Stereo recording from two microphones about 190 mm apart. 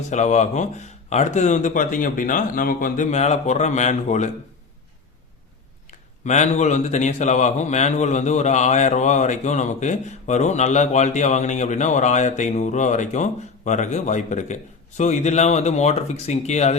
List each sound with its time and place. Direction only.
0.1 s a man's voice: 40° left (ahead or behind)
5.9 s a man's voice: 40° left (ahead or behind)